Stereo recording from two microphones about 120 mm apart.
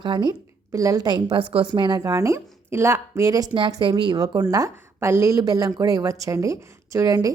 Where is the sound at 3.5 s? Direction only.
40° right (ahead or behind).